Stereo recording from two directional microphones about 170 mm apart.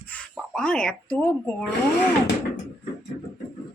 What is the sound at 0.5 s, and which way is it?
Speech, 5° left (ahead or behind).